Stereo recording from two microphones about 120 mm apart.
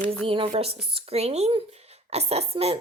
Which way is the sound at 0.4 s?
55° right (ahead or behind).